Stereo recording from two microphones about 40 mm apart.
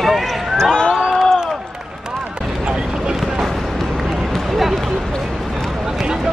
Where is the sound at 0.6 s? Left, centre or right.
Centre.